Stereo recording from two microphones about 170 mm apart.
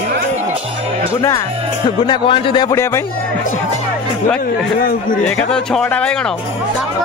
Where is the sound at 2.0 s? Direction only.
30° left (ahead or behind).